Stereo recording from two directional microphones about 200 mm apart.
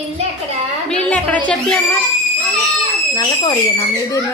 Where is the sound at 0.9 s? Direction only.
5° left (ahead or behind).